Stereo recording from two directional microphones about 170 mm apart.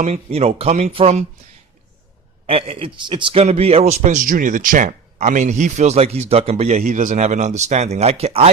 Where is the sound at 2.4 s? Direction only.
35° right (ahead or behind).